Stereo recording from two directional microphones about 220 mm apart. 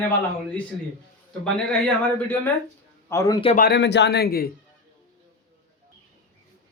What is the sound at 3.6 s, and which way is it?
Speech, 50° left (ahead or behind).